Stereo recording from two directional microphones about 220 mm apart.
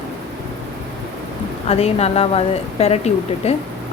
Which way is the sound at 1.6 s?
30° left (ahead or behind).